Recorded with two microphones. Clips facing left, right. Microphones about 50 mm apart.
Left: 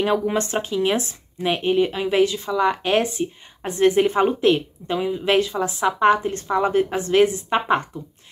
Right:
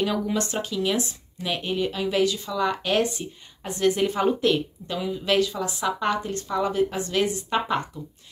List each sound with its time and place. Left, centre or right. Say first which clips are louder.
0.0 s speech: left 4 dB; left